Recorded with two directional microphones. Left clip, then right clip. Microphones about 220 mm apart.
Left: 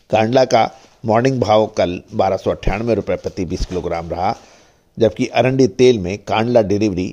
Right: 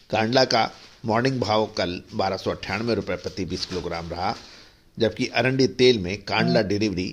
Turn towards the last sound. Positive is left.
turn(degrees=35)  # may be behind; listen again after turning